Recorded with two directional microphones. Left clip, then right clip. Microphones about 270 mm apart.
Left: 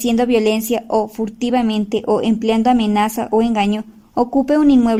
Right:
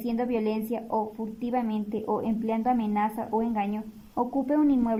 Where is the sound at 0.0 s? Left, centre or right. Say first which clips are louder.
Left 13 dB; left.